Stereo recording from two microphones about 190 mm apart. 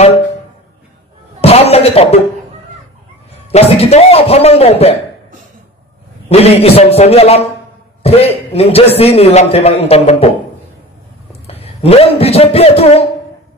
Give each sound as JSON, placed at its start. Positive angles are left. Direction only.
{"t": 1.4, "sound": "a sound", "side_deg": 35}
{"t": 3.5, "sound": "a man's voice", "side_deg": 30}
{"t": 6.2, "sound": "a man's voice", "side_deg": 35}
{"t": 11.4, "sound": "a man's voice", "side_deg": 30}